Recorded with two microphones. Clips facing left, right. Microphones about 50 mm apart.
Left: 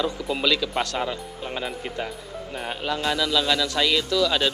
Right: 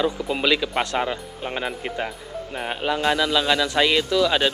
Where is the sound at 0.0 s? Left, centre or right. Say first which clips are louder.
Right 2 dB; right.